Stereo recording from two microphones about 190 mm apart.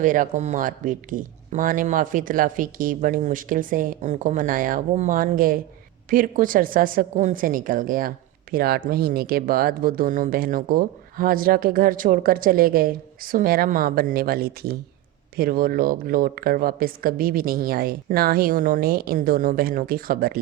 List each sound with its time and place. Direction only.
0.0 s a woman's voice: 45° right (ahead or behind)